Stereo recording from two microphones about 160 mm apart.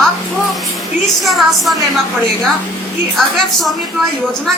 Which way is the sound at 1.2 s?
Centre (ahead or behind).